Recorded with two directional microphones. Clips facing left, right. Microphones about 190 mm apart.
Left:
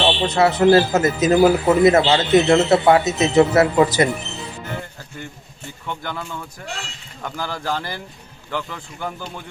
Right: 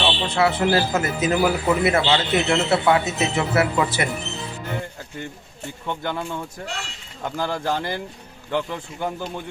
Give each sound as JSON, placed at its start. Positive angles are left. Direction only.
{"t": 0.0, "sound": "speech", "side_deg": 40}
{"t": 5.8, "sound": "a man's voice", "side_deg": -20}